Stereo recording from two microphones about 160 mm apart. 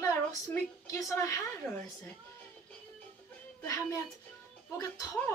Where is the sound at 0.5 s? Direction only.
20° left (ahead or behind).